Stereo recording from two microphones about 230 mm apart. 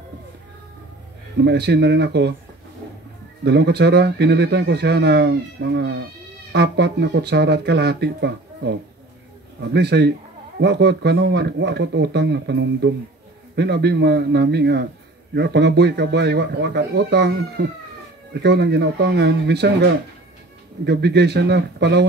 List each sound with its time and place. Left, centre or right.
1.4 s speech: right
3.4 s speech: right